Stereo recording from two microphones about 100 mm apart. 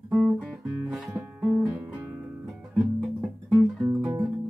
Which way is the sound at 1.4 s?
20° right (ahead or behind).